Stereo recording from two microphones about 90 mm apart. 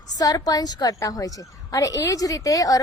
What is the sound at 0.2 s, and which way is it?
A woman's voice, 45° left (ahead or behind).